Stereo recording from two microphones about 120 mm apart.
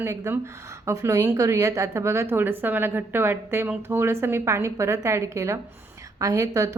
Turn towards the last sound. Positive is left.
turn(degrees=-30)  # may be behind; listen again after turning